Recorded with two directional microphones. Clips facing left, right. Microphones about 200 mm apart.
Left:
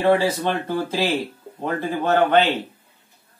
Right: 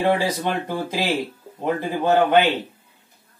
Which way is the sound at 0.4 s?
10° right (ahead or behind).